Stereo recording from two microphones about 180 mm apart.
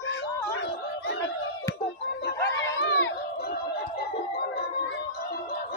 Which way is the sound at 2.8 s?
90° left.